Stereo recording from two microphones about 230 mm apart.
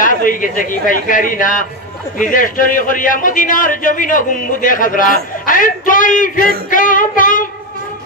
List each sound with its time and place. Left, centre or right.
0.0 s a man's voice: left